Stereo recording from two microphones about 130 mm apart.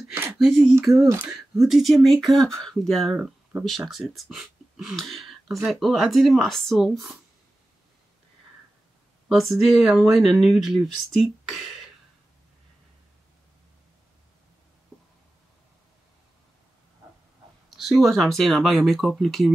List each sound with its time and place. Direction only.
0.1 s a sound: 15° right (ahead or behind)
0.4 s speech: centre (ahead or behind)
1.0 s speech: 15° right (ahead or behind)
1.3 s speech: centre (ahead or behind)
9.7 s speech: centre (ahead or behind)
17.6 s speech: centre (ahead or behind)